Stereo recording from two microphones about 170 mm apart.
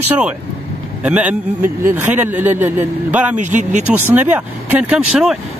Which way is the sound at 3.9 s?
10° right (ahead or behind).